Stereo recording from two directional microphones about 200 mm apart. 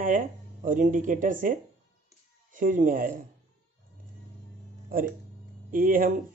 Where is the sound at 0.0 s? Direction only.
40° right (ahead or behind).